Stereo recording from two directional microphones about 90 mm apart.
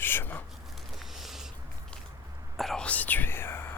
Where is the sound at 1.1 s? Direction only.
5° right (ahead or behind).